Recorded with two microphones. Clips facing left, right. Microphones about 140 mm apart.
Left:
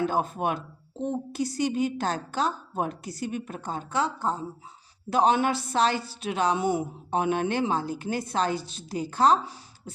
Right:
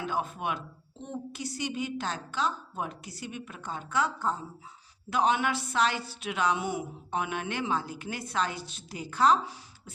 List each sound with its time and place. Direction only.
0.0 s a woman's voice: 40° left (ahead or behind)